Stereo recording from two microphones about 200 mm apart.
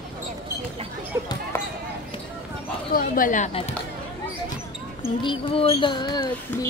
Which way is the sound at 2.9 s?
40° left (ahead or behind).